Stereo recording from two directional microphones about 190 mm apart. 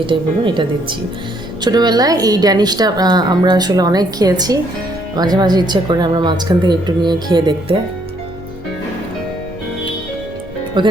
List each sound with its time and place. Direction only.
0.0 s a woman's voice: 25° right (ahead or behind)
10.8 s a woman's voice: 25° right (ahead or behind)